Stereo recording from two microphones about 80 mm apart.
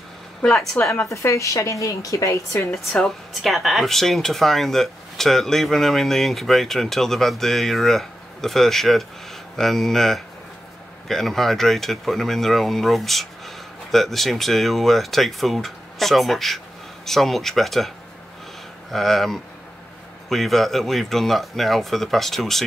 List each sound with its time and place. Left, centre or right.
0.4 s speech: centre
1.1 s speech: left
3.4 s speech: centre